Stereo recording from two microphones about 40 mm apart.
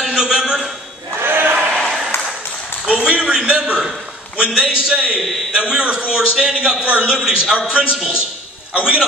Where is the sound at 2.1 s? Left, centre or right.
Left.